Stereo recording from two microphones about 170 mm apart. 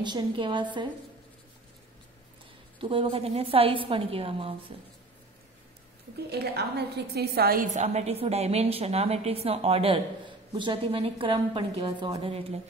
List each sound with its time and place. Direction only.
0.0 s a woman's voice: 25° right (ahead or behind)
2.8 s a woman's voice: 30° right (ahead or behind)
6.3 s a woman's voice: 70° right (ahead or behind)
7.7 s a woman's voice: 40° right (ahead or behind)